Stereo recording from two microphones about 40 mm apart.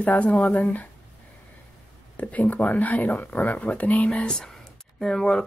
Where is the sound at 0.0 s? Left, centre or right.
Left.